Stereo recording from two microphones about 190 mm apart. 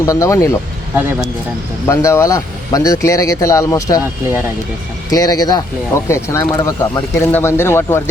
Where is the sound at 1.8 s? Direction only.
15° left (ahead or behind).